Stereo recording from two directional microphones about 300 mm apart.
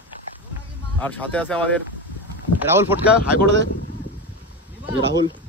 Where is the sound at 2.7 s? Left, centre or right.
Centre.